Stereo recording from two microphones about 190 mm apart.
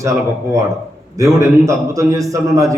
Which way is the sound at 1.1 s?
15° right (ahead or behind).